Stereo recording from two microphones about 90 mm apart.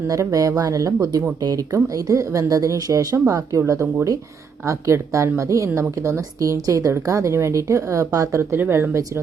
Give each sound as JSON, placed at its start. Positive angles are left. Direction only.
{"t": 0.1, "sound": "a woman's voice", "side_deg": -40}
{"t": 4.6, "sound": "a woman's voice", "side_deg": -35}